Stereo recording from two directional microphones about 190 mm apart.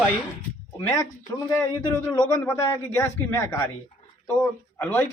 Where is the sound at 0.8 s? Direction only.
15° left (ahead or behind).